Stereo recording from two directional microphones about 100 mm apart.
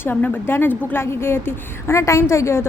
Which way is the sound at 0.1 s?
20° left (ahead or behind).